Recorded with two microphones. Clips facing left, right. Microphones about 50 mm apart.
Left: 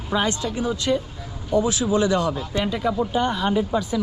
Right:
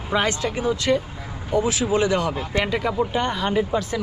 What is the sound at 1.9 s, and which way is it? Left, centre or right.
Speech, right.